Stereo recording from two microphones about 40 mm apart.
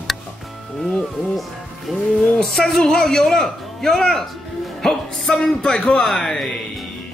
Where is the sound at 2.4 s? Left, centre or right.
Centre.